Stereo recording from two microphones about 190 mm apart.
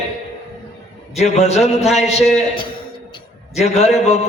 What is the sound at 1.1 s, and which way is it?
A man's voice, 35° left (ahead or behind).